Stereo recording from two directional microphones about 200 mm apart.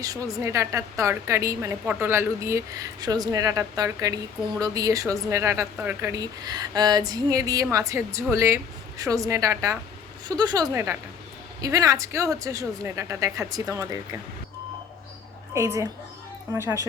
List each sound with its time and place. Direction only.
0.0 s a woman's voice: 15° right (ahead or behind)
15.5 s a woman's voice: 15° right (ahead or behind)